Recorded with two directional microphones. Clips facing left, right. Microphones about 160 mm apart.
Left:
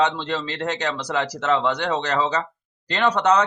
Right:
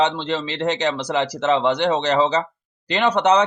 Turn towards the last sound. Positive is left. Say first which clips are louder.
# right 2 dB
turn(degrees=-20)  # may be behind; listen again after turning